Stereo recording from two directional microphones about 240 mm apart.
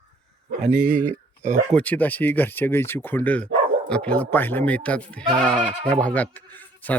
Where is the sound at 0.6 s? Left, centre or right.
Right.